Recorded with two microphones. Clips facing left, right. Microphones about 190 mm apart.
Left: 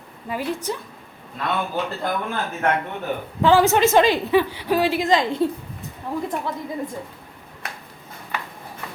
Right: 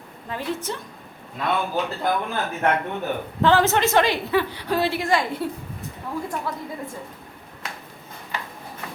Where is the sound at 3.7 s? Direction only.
15° left (ahead or behind).